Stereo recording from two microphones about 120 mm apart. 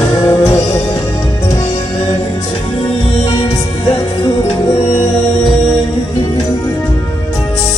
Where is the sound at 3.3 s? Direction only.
45° left (ahead or behind).